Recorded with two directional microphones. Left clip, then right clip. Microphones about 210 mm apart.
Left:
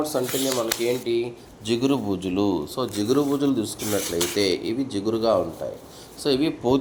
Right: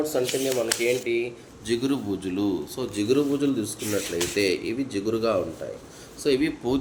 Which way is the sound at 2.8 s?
5° right (ahead or behind).